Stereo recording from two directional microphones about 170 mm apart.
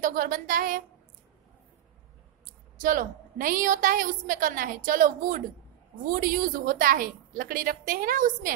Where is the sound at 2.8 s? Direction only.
55° right (ahead or behind).